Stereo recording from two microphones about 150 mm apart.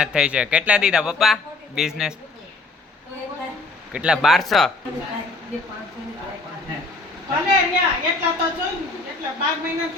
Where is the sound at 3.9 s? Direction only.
5° right (ahead or behind).